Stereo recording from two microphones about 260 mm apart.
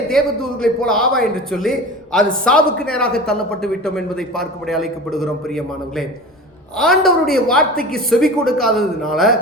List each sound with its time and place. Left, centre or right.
0.6 s a man's voice: centre